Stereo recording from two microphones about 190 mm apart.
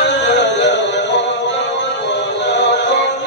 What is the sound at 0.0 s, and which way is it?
Music, 65° left (ahead or behind).